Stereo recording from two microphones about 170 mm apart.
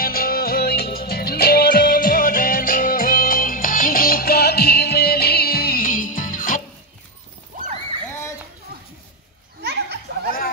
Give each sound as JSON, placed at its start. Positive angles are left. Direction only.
{"t": 0.0, "sound": "music", "side_deg": 60}
{"t": 7.5, "sound": "horse", "side_deg": -55}
{"t": 8.1, "sound": "a sound", "side_deg": 15}
{"t": 9.6, "sound": "children playing", "side_deg": -75}